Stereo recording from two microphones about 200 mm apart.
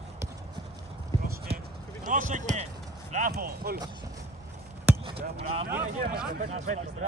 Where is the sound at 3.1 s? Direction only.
45° right (ahead or behind).